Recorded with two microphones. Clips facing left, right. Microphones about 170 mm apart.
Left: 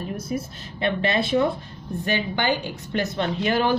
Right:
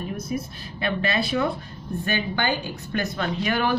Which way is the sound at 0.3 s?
25° left (ahead or behind).